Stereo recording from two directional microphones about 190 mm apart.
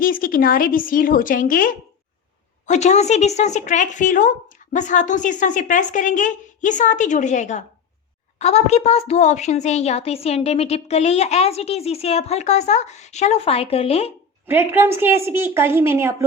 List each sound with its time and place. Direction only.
0.0 s a woman's voice: 50° left (ahead or behind); by 14.1 s 30° left (ahead or behind)
14.4 s a woman's voice: 10° right (ahead or behind)